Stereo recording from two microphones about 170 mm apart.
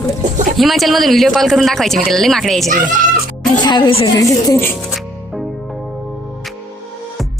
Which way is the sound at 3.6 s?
25° left (ahead or behind).